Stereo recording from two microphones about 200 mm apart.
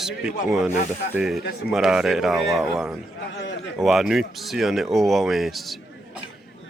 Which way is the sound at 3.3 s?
65° left (ahead or behind).